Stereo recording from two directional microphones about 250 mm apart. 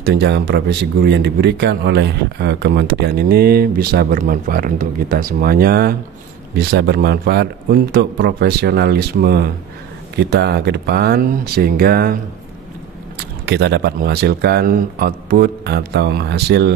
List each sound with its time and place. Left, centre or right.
0.0 s speech: right
13.5 s speech: right